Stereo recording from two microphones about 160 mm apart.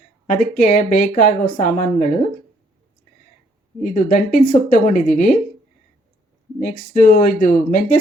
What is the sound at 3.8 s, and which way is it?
A woman's voice, 45° left (ahead or behind).